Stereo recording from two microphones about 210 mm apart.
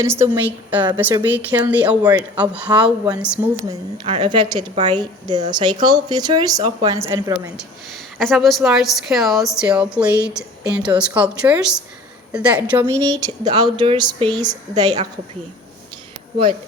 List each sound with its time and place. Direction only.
0.0 s a woman's voice: 10° right (ahead or behind)
4.0 s speech: 25° right (ahead or behind)
8.2 s a woman's voice: centre (ahead or behind); by 14.9 s 20° right (ahead or behind)